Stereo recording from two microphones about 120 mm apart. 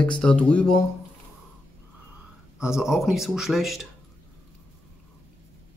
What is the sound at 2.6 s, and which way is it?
Speech, 5° right (ahead or behind).